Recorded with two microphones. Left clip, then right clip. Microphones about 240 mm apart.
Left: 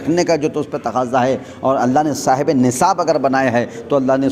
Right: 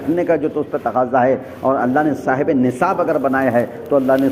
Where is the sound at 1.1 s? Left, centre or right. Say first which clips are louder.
Right 1 dB; left.